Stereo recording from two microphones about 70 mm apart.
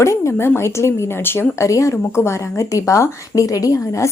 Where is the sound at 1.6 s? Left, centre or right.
Left.